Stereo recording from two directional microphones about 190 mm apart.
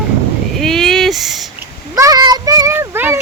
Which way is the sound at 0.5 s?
Centre (ahead or behind).